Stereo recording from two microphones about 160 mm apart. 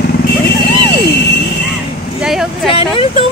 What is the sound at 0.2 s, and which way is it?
Vehicle, 80° left.